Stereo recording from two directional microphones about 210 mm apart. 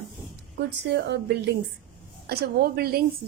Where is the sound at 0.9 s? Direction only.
55° right (ahead or behind).